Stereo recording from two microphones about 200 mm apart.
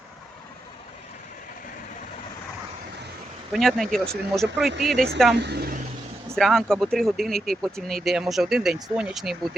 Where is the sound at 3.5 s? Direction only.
Centre (ahead or behind).